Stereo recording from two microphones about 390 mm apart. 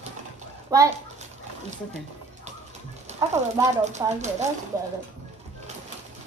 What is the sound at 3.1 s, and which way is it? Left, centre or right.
Speech, centre.